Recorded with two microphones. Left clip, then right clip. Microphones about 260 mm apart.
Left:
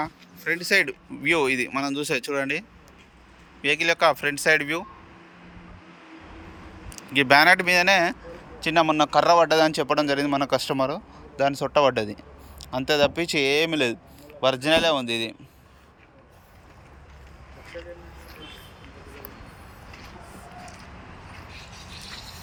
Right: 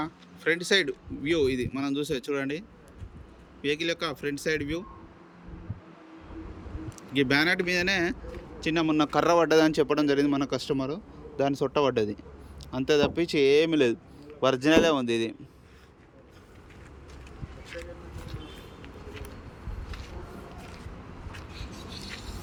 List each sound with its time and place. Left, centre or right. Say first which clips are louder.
0.0 s speech: even; centre
7.1 s speech: left 8 dB; centre
21.5 s a sound: left 1 dB; right